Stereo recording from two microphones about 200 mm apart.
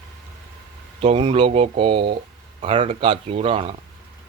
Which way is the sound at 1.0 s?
30° right (ahead or behind).